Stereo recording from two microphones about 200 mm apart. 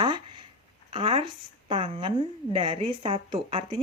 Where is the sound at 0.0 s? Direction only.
25° right (ahead or behind).